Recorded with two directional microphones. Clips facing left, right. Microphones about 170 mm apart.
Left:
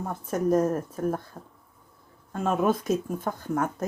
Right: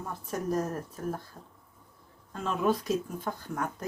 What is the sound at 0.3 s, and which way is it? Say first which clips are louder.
Speech: left 8 dB; 50° left (ahead or behind).